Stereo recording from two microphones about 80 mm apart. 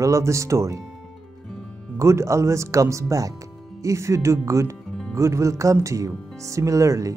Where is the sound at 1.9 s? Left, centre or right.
Right.